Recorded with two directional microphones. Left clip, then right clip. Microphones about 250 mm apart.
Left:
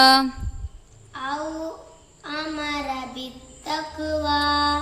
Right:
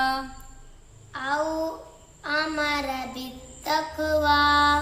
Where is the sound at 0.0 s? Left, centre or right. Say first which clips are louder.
Left 11 dB; left.